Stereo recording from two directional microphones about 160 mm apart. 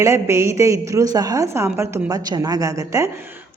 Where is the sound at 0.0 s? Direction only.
15° right (ahead or behind).